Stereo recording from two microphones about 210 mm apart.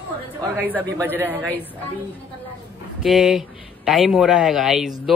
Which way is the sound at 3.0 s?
Centre (ahead or behind).